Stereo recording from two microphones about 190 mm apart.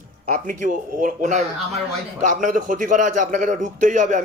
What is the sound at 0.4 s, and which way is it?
A man's voice, 45° right (ahead or behind).